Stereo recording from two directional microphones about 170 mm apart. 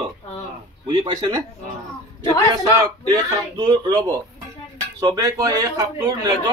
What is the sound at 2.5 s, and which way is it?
A man's voice, 20° right (ahead or behind).